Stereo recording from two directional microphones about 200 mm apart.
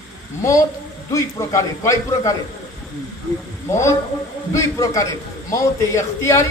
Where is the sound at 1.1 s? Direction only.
15° left (ahead or behind).